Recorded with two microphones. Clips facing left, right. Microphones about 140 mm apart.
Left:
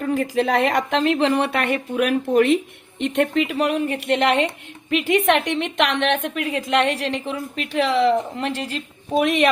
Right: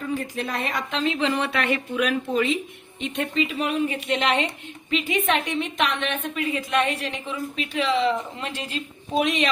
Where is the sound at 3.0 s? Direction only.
75° left (ahead or behind).